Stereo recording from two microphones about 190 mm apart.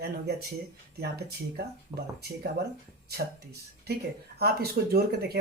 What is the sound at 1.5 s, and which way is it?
Speech, 55° right (ahead or behind).